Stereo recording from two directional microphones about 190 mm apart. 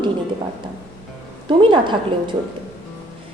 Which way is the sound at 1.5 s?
25° right (ahead or behind).